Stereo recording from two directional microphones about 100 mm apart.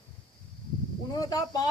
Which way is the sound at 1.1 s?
40° left (ahead or behind).